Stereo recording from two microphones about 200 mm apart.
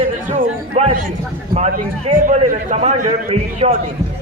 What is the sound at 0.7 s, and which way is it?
A man's voice, 30° right (ahead or behind).